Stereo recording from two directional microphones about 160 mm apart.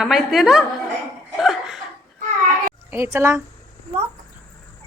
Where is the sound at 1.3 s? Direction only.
Centre (ahead or behind).